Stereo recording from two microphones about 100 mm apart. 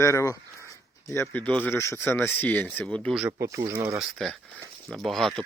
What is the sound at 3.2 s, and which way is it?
Speech, 30° right (ahead or behind).